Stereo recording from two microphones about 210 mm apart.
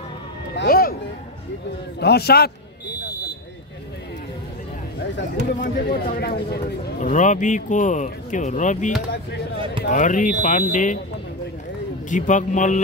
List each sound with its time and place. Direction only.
0.6 s a sound: 45° left (ahead or behind)
2.0 s a man's voice: 50° left (ahead or behind)
5.6 s speech: 50° left (ahead or behind)
12.1 s speech: 35° left (ahead or behind)